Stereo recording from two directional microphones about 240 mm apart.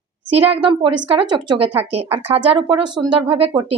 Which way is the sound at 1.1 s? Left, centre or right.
Right.